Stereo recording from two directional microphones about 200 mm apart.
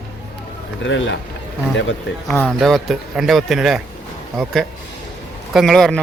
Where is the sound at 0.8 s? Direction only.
65° left (ahead or behind).